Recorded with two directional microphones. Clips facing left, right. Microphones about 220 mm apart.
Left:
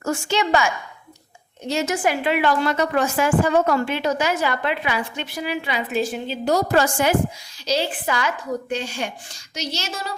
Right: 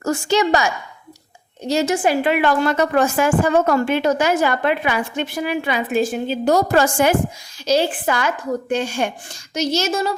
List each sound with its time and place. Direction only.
0.0 s a woman's voice: 40° right (ahead or behind)
2.2 s a woman's voice: 50° right (ahead or behind)